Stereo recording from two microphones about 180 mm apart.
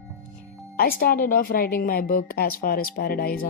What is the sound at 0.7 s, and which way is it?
Speech, 55° left (ahead or behind).